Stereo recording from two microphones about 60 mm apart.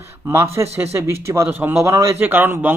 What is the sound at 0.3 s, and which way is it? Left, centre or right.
Speech, right.